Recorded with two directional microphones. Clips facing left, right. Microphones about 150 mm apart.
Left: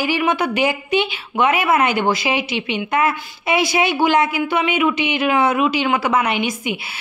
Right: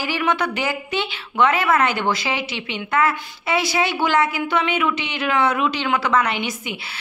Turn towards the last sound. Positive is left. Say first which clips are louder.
# left 4 dB
turn(degrees=15)  # may be behind; listen again after turning